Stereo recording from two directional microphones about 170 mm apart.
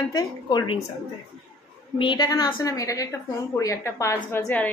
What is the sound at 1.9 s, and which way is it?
A woman's voice, 30° left (ahead or behind).